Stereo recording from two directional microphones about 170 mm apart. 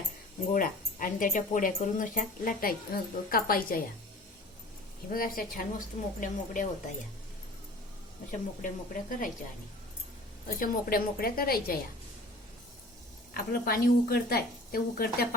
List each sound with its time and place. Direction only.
0.5 s speech: 55° left (ahead or behind)
5.1 s speech: 55° left (ahead or behind)
8.3 s speech: 50° left (ahead or behind)
10.4 s speech: 60° left (ahead or behind)
13.3 s speech: 60° left (ahead or behind)